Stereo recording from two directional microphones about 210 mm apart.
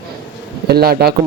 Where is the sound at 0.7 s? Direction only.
50° right (ahead or behind).